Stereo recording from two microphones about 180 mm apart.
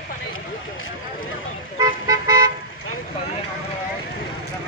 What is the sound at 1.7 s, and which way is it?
Car, 20° right (ahead or behind).